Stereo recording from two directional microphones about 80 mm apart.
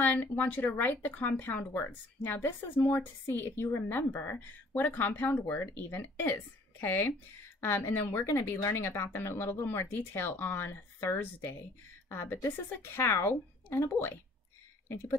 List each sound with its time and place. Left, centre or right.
0.0 s speech: left